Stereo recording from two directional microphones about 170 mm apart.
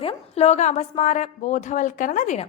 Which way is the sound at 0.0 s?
40° left (ahead or behind).